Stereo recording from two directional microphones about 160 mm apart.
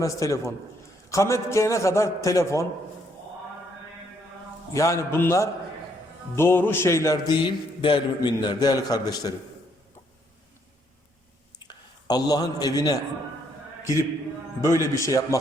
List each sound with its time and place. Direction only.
0.0 s music: 20° left (ahead or behind)
4.7 s music: 20° left (ahead or behind)
11.7 s a man's voice: 25° left (ahead or behind)
14.6 s music: 20° left (ahead or behind)